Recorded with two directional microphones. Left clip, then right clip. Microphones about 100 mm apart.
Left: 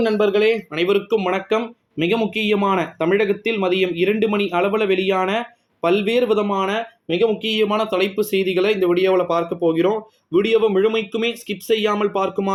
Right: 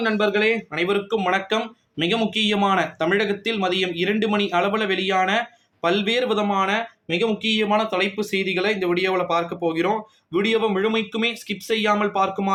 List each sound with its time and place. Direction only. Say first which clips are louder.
0.0 s speech: left 3 dB; 35° left (ahead or behind)